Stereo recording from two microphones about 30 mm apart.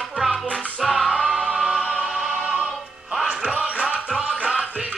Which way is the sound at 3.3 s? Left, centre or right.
Right.